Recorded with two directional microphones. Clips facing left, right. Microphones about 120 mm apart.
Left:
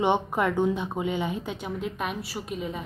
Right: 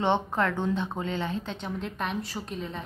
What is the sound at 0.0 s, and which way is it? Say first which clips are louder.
A woman's voice: left 2 dB; 15° left (ahead or behind).